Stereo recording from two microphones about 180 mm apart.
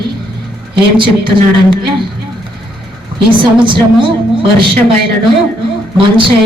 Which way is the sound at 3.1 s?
25° right (ahead or behind).